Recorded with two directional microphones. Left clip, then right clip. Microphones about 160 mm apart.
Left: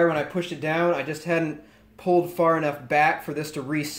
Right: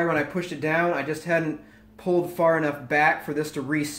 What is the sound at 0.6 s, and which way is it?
Speech, 30° left (ahead or behind).